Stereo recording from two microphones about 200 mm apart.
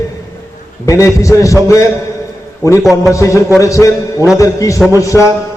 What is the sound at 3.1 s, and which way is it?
A man's voice, 15° left (ahead or behind).